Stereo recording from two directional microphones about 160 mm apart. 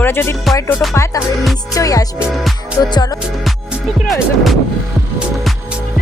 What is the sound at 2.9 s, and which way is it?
Music, 25° left (ahead or behind).